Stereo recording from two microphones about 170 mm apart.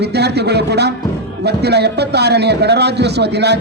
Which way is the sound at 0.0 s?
75° right (ahead or behind).